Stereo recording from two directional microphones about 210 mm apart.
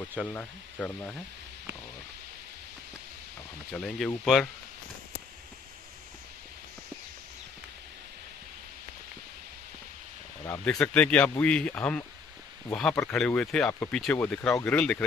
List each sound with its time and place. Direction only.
0.2 s speech: 5° left (ahead or behind)
3.7 s speech: centre (ahead or behind)
10.4 s speech: 10° left (ahead or behind)